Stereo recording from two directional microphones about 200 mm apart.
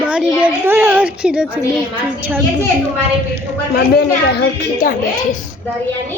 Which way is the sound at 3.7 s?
55° left (ahead or behind).